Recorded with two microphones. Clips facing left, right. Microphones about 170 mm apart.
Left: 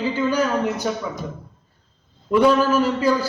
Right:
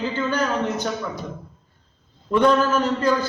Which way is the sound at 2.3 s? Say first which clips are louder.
Left 2 dB; 10° left (ahead or behind).